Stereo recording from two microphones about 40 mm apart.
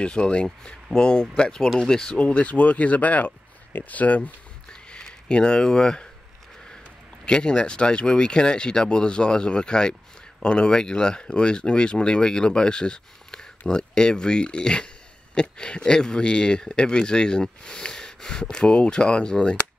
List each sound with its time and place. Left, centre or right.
0.0 s speech: left
2.1 s speech: left
4.8 s speech: left
7.2 s speech: left